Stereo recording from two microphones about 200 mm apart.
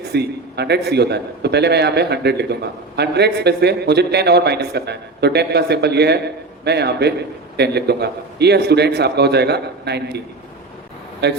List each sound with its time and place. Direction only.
0.1 s a man's voice: 55° right (ahead or behind)
11.2 s a man's voice: 55° right (ahead or behind)